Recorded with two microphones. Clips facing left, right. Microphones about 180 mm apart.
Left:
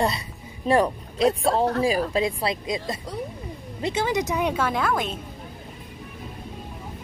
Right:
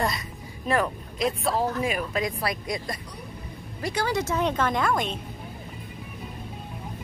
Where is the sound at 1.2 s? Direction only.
30° left (ahead or behind); by 5.1 s 5° left (ahead or behind).